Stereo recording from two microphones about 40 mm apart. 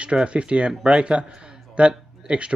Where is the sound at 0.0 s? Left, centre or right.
Right.